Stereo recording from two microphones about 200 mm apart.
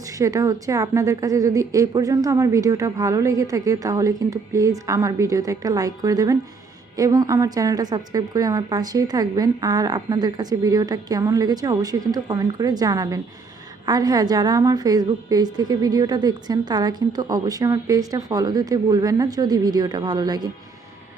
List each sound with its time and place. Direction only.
0.0 s a woman's voice: 15° right (ahead or behind)